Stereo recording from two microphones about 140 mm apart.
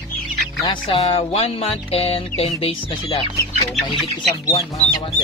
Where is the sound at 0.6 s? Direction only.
35° left (ahead or behind).